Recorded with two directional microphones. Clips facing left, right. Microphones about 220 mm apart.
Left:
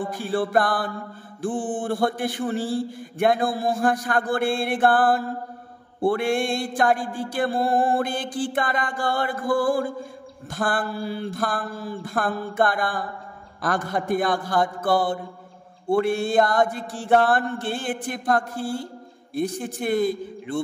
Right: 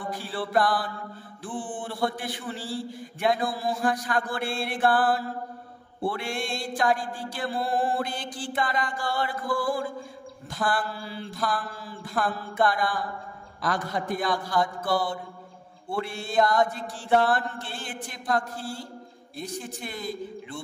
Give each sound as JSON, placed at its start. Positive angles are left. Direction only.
{"t": 0.0, "sound": "music", "side_deg": 50}